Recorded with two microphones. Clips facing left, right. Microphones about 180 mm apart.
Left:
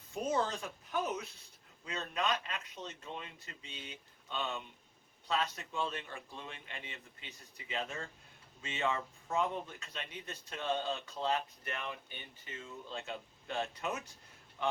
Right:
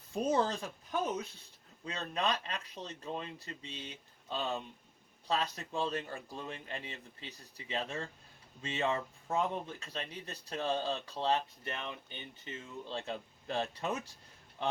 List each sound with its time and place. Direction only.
0.3 s speech: 35° right (ahead or behind)